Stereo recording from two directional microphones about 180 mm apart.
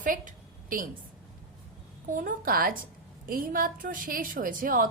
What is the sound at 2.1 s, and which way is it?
A woman's voice, 50° right (ahead or behind).